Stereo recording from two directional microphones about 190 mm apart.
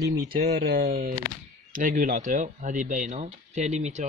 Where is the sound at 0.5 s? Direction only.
55° right (ahead or behind); by 4.1 s 35° right (ahead or behind).